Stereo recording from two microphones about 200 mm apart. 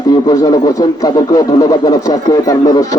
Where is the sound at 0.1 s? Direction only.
20° left (ahead or behind).